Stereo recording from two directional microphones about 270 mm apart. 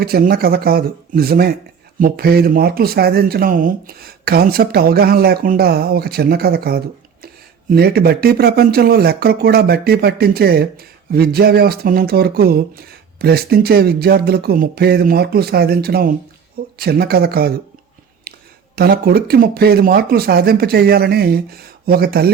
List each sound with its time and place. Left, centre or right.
0.0 s speech: right
18.3 s a sound: right
18.8 s speech: right